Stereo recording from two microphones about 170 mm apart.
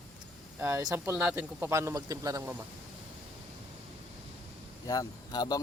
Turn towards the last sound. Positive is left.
turn(degrees=25)  # may be behind; listen again after turning